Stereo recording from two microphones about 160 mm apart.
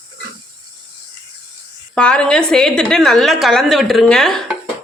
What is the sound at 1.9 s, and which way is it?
A woman's voice, 5° left (ahead or behind).